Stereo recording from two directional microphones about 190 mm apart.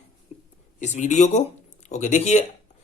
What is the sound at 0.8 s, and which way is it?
A man's voice, 40° left (ahead or behind).